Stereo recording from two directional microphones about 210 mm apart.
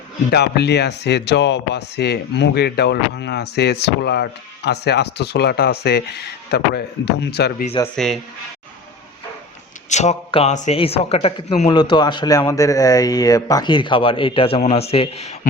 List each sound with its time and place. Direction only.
0.3 s speech: 50° left (ahead or behind)
7.9 s speech: centre (ahead or behind)
9.9 s a man's voice: 30° left (ahead or behind)